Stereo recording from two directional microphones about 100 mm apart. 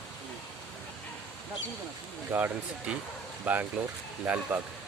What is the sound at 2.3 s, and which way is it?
Speech, 20° right (ahead or behind).